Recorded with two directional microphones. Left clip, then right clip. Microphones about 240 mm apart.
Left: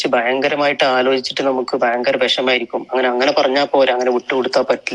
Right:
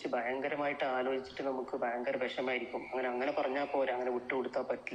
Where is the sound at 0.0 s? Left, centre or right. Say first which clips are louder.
Left 19 dB; left.